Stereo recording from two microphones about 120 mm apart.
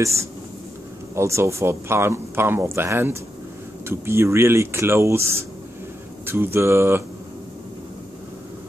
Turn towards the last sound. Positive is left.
turn(degrees=-20)  # may be behind; listen again after turning